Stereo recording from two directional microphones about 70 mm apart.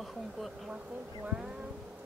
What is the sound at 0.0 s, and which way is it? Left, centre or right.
Speech, centre.